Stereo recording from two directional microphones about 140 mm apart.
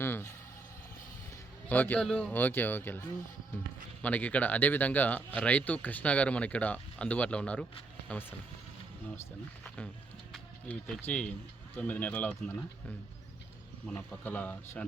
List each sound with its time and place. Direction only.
0.0 s a sound: 15° left (ahead or behind)
1.7 s speech: 10° left (ahead or behind)
4.0 s speech: 10° left (ahead or behind)
9.6 s speech: 10° left (ahead or behind)
13.9 s speech: 15° left (ahead or behind)